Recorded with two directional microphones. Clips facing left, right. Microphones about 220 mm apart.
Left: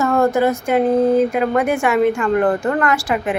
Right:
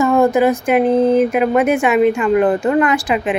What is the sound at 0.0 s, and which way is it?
Speech, 15° right (ahead or behind).